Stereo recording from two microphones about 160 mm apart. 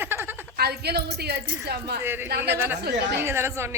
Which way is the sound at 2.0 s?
15° right (ahead or behind).